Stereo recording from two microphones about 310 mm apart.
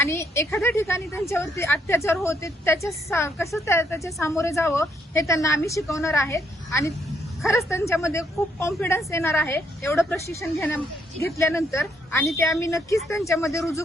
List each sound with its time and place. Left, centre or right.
0.0 s speech: centre